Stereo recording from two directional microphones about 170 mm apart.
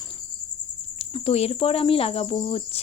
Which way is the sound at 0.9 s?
35° left (ahead or behind).